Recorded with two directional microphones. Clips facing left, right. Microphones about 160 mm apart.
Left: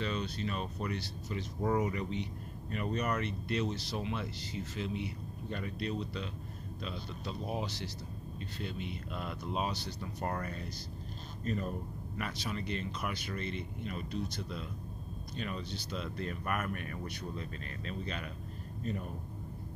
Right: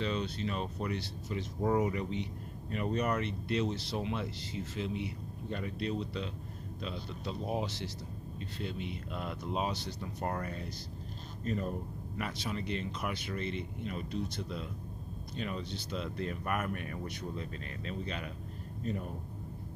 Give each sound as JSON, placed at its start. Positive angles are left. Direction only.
{"t": 0.0, "sound": "speech", "side_deg": -25}
{"t": 12.2, "sound": "speech", "side_deg": -20}